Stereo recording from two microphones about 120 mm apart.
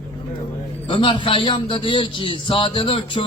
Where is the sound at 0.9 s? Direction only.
45° left (ahead or behind).